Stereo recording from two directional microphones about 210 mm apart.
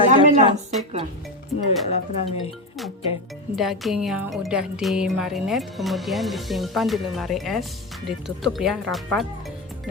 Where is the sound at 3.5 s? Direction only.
Centre (ahead or behind).